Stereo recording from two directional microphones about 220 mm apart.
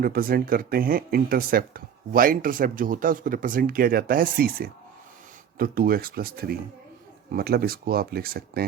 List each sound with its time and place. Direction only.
0.0 s speech: 40° right (ahead or behind)